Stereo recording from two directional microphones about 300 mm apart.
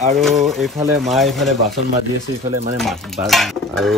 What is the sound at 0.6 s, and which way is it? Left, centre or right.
Stir, centre.